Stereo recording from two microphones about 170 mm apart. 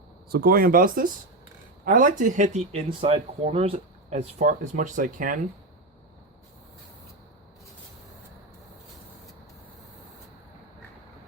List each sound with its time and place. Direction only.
0.3 s speech: 65° right (ahead or behind)